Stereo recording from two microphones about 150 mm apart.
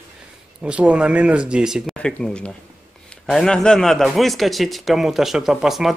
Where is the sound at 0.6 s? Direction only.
10° right (ahead or behind).